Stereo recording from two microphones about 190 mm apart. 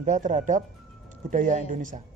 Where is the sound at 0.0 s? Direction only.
40° right (ahead or behind).